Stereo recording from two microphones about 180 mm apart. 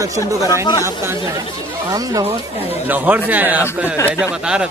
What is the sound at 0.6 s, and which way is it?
Speech, 25° left (ahead or behind).